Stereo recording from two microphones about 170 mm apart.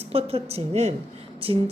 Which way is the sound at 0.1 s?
35° right (ahead or behind).